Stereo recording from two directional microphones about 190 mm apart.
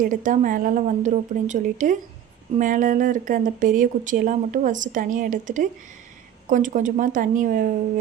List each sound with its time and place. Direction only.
0.0 s speech: 45° right (ahead or behind)